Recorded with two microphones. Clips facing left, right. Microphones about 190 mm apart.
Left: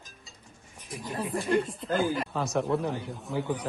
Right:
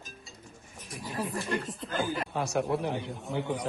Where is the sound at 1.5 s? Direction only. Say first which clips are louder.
Left 7 dB; centre (ahead or behind).